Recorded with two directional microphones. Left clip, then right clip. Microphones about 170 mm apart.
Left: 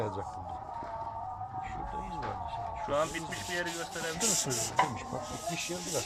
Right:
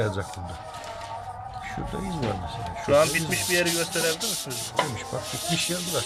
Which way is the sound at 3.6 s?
80° right.